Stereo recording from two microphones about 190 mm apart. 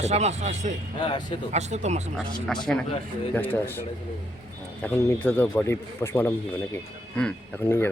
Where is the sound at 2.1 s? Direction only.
5° left (ahead or behind).